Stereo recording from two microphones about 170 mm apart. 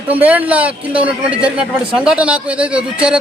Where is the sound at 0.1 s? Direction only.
10° right (ahead or behind).